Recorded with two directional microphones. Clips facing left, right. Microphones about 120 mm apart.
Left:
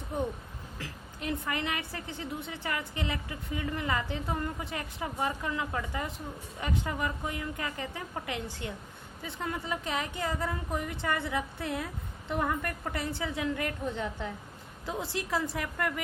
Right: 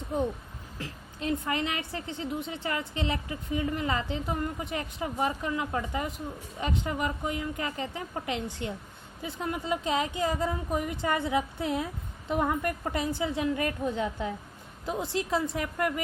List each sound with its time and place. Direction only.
0.8 s a woman's voice: 25° right (ahead or behind)
13.9 s a woman's voice: 10° right (ahead or behind)
14.8 s a woman's voice: 25° right (ahead or behind)